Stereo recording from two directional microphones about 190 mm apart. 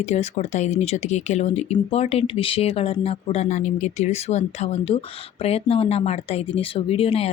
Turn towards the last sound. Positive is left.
turn(degrees=30)  # may be behind; listen again after turning